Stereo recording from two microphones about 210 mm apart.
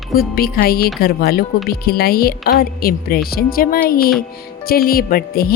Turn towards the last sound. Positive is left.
turn(degrees=45)  # may be behind; listen again after turning